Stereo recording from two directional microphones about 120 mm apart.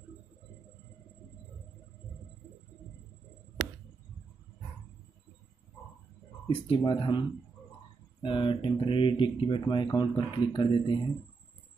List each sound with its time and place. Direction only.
6.4 s speech: 50° left (ahead or behind)